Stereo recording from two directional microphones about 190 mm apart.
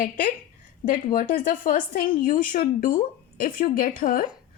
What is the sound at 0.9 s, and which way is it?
A woman's voice, 45° left (ahead or behind).